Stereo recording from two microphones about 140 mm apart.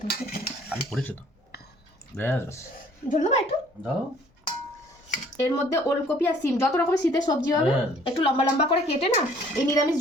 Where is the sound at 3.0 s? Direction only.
60° left (ahead or behind).